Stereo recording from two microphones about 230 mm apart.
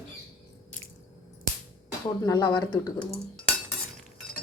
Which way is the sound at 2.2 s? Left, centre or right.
Centre.